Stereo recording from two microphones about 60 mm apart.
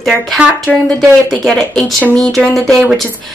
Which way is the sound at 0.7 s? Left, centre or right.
Centre.